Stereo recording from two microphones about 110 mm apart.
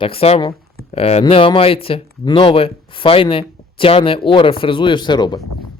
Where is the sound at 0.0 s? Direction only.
60° left (ahead or behind).